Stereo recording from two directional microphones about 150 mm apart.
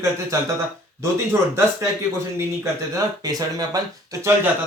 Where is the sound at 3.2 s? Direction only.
25° right (ahead or behind).